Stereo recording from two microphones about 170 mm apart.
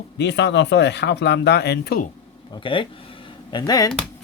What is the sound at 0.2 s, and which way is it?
Speech, 90° left.